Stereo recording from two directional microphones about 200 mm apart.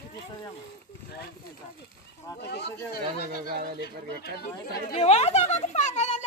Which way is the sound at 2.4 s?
55° left (ahead or behind).